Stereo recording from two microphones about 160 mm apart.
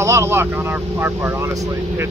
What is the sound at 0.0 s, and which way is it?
Speech, 15° right (ahead or behind).